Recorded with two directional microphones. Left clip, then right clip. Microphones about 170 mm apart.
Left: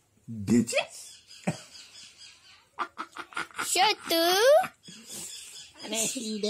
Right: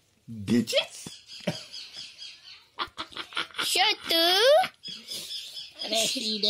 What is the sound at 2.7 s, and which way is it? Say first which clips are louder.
Chicken: right 1 dB; 25° left (ahead or behind).